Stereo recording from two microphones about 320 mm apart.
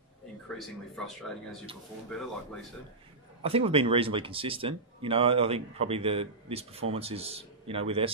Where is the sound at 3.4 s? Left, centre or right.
Centre.